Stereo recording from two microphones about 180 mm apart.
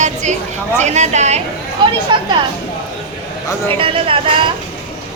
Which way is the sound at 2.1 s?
25° right (ahead or behind).